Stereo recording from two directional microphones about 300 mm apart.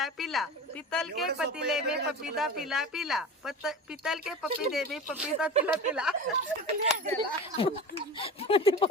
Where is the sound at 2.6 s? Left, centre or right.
Centre.